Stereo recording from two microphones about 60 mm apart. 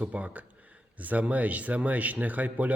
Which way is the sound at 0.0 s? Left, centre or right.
Right.